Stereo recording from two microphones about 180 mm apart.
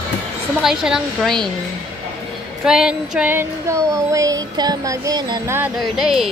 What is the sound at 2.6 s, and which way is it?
Child singing, 5° right (ahead or behind).